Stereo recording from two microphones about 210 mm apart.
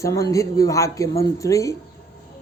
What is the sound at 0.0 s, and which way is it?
A man's voice, 15° left (ahead or behind).